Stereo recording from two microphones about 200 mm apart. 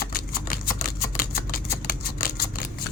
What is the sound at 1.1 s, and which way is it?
Scissors, 45° left (ahead or behind).